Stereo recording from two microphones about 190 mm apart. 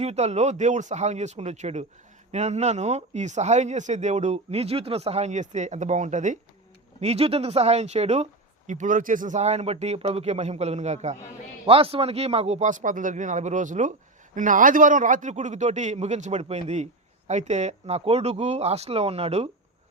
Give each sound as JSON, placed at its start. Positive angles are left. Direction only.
{"t": 0.0, "sound": "a man's voice", "side_deg": -35}